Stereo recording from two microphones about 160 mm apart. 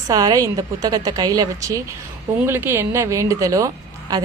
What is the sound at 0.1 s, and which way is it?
Speech, 20° right (ahead or behind).